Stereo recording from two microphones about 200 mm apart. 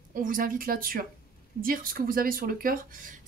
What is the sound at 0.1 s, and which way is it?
Speech, 45° right (ahead or behind).